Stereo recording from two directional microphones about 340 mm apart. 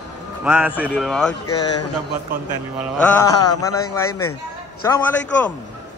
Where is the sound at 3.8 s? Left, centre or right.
Left.